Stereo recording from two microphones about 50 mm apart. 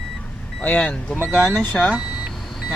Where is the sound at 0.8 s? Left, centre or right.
Left.